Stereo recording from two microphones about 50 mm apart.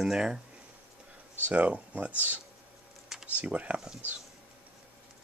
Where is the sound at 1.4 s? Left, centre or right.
Right.